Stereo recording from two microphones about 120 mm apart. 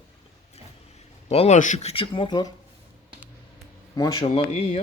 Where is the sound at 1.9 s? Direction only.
45° left (ahead or behind).